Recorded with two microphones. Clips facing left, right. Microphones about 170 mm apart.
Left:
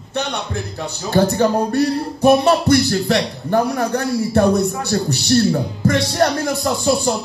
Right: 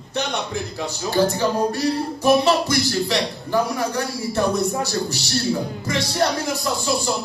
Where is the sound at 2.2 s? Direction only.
55° left (ahead or behind).